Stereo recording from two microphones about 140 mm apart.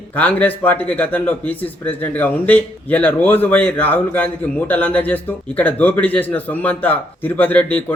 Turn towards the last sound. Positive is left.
turn(degrees=10)  # may be behind; listen again after turning